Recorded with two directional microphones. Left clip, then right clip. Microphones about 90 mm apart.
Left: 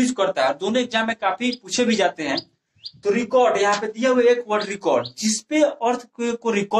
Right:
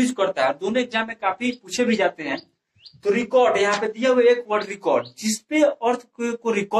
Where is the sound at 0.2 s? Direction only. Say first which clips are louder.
Left 1 dB; 25° left (ahead or behind).